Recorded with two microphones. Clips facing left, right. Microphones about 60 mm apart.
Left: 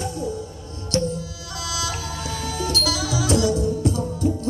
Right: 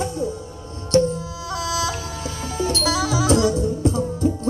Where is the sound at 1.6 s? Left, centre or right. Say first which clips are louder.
Right 3 dB; right.